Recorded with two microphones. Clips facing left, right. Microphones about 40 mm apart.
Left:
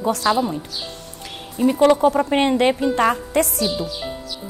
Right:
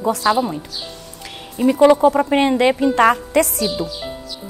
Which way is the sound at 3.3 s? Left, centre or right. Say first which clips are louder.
Right 3 dB; right.